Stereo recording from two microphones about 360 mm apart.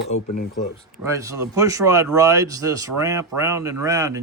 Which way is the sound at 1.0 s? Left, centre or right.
Centre.